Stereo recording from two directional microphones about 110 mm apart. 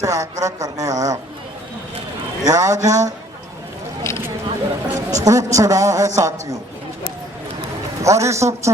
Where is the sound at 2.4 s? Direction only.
30° right (ahead or behind).